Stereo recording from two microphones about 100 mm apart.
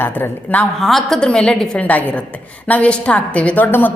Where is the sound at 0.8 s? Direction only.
5° left (ahead or behind); by 3.9 s 20° left (ahead or behind).